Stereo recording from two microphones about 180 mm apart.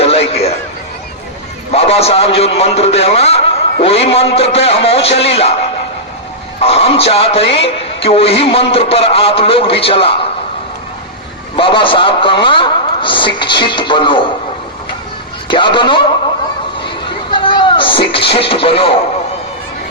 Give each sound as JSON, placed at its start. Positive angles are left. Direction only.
{"t": 0.0, "sound": "a sound", "side_deg": 35}
{"t": 1.7, "sound": "a man's voice", "side_deg": 35}
{"t": 6.6, "sound": "a man's voice", "side_deg": 35}
{"t": 11.5, "sound": "a man's voice", "side_deg": 30}
{"t": 15.4, "sound": "a man's voice", "side_deg": 25}
{"t": 17.3, "sound": "speech", "side_deg": 25}